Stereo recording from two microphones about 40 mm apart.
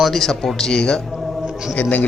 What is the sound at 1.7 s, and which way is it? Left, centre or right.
Speech, left.